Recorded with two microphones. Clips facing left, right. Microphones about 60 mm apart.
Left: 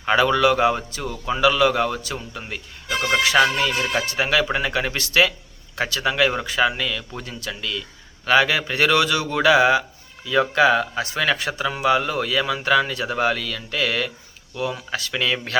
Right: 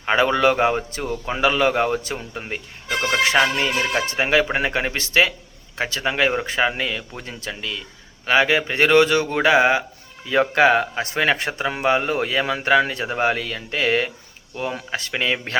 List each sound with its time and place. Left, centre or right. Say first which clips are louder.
0.0 s speech: even; right
1.3 s speech: left 1 dB; right
2.9 s speech: even; centre
3.6 s speech: right 1 dB; right